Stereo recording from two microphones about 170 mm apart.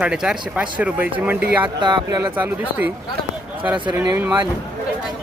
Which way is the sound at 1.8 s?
25° right (ahead or behind).